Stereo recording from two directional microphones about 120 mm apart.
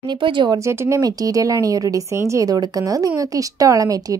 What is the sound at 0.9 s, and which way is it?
Speech, 25° right (ahead or behind).